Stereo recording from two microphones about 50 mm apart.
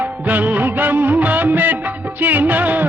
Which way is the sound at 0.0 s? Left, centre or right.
Right.